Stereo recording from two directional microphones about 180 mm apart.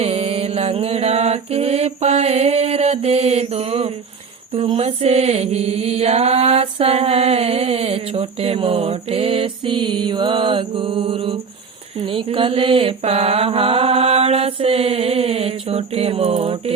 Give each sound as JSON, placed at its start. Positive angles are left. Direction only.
{"t": 0.0, "sound": "mantra", "side_deg": -35}